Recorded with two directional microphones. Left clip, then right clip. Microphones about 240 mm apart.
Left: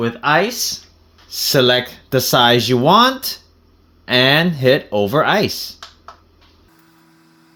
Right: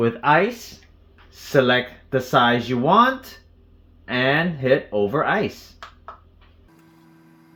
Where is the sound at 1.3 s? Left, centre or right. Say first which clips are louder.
Left 4 dB; left.